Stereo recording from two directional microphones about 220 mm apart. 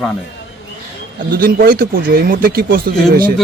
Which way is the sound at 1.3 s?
40° right (ahead or behind).